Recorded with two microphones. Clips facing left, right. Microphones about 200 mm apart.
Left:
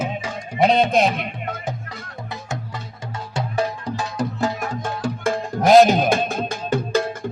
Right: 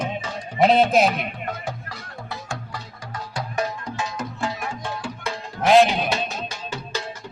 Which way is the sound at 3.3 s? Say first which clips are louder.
Left 3 dB; 35° left (ahead or behind).